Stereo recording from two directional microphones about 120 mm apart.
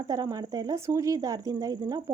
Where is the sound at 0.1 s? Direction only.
30° right (ahead or behind).